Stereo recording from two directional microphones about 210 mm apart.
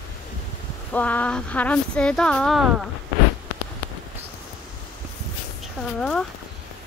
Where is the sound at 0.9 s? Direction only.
5° left (ahead or behind).